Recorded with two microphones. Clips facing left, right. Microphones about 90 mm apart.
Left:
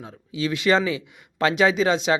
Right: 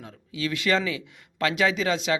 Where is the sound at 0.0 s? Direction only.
20° left (ahead or behind).